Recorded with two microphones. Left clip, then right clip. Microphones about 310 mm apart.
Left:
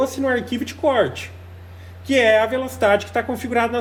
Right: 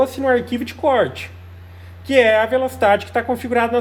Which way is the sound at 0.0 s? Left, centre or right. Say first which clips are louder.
Right 4 dB; right.